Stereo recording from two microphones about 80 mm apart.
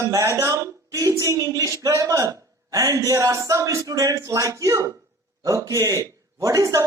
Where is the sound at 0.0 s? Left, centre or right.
Right.